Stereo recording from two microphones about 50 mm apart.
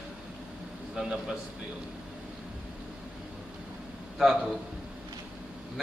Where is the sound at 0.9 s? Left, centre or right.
Centre.